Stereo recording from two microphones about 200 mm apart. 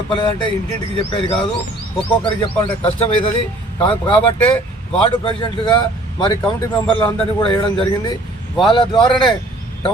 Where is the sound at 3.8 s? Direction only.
25° left (ahead or behind).